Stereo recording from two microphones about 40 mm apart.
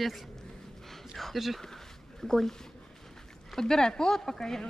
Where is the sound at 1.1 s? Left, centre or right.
Centre.